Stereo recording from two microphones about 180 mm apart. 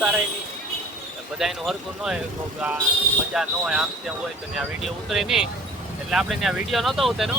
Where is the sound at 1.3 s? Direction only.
Centre (ahead or behind).